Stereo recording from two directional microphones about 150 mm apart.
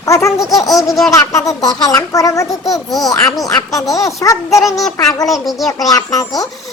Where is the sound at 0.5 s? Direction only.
20° left (ahead or behind).